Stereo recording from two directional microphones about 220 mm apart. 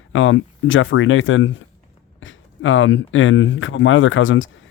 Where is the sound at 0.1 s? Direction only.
60° left (ahead or behind).